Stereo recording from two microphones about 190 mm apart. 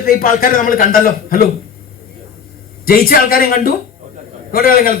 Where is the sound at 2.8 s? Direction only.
50° left (ahead or behind).